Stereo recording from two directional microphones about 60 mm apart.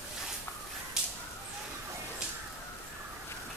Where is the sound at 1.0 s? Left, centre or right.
Centre.